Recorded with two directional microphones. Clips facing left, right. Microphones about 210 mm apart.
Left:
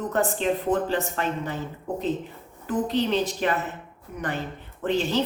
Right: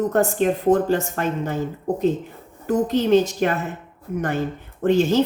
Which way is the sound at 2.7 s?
45° right (ahead or behind).